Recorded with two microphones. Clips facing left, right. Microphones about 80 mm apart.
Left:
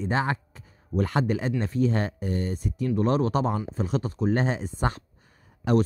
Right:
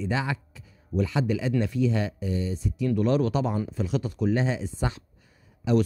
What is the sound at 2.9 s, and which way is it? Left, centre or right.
Speech, left.